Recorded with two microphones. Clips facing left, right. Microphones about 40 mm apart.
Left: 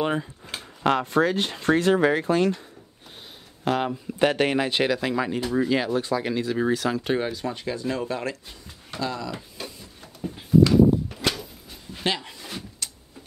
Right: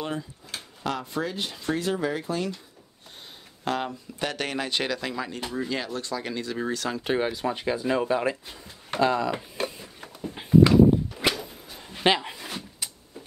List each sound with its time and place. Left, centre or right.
0.0 s speech: left
0.8 s speech: left
3.6 s speech: centre
4.2 s speech: left
7.0 s speech: centre
9.0 s speech: right
9.8 s a sound: right
12.4 s a sound: centre